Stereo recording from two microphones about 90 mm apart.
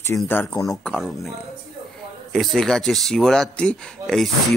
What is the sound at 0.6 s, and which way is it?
Speech, 5° left (ahead or behind).